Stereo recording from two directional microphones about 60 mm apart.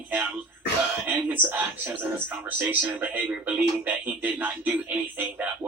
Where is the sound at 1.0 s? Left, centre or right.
Right.